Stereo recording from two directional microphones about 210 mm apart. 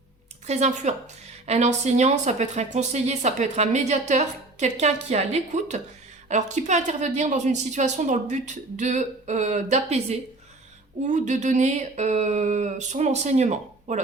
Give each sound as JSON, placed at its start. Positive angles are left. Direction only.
{"t": 0.4, "sound": "a woman's voice", "side_deg": -35}